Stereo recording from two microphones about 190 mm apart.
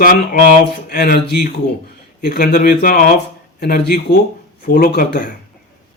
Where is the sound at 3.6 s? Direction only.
55° left (ahead or behind).